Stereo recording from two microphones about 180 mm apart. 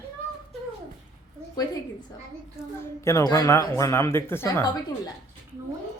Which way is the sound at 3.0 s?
15° left (ahead or behind).